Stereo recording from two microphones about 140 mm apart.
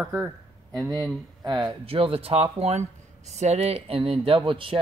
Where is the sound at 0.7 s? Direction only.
25° right (ahead or behind).